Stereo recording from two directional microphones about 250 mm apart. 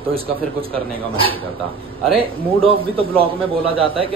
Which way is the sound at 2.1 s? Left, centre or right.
Right.